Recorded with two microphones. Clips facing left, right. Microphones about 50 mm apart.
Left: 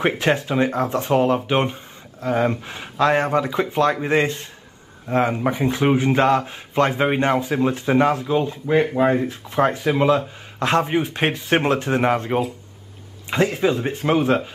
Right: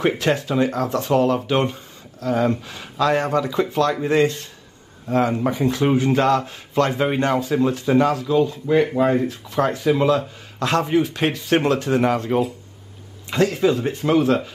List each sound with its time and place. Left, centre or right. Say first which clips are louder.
0.2 s speech: even; left
8.9 s speech: even; centre
9.3 s speech: left 2 dB; left